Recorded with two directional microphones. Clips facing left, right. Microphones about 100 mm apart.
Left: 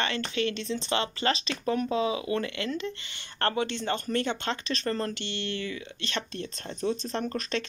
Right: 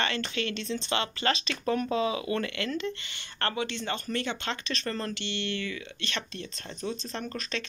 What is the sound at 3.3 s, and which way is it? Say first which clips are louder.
Speech: left 3 dB; 40° left (ahead or behind).